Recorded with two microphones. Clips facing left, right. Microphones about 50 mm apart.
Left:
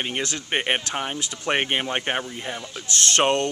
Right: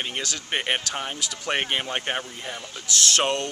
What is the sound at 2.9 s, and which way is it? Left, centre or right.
Speech, left.